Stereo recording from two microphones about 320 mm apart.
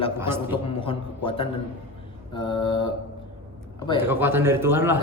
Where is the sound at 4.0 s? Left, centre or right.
Centre.